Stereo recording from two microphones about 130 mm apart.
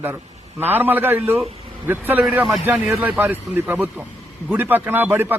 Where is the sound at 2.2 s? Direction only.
5° right (ahead or behind).